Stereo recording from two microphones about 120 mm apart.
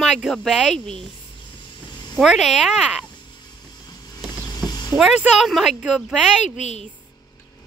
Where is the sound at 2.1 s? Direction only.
Centre (ahead or behind).